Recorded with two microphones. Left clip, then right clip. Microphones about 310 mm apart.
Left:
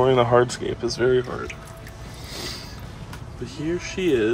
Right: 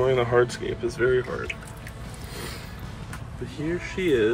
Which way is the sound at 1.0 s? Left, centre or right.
Left.